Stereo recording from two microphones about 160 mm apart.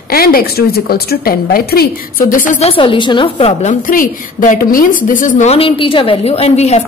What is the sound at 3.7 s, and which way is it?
A woman's voice, 55° left (ahead or behind).